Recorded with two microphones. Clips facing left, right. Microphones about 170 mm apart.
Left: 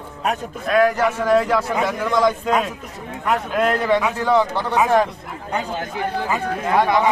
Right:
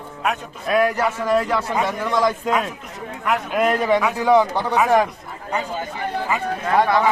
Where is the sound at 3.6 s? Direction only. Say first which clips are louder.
Right 1 dB; 10° right (ahead or behind).